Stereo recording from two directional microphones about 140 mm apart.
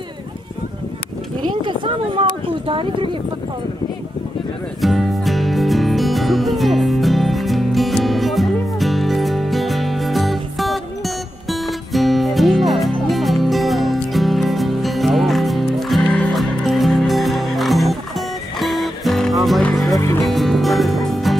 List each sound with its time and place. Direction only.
1.6 s speech: 40° right (ahead or behind)
4.8 s music: centre (ahead or behind)
20.0 s music: 20° left (ahead or behind)
20.2 s music: centre (ahead or behind)